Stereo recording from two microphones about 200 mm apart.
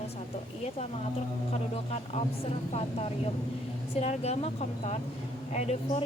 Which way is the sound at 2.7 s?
30° left (ahead or behind).